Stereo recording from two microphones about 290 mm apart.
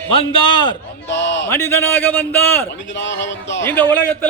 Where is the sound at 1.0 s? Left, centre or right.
Left.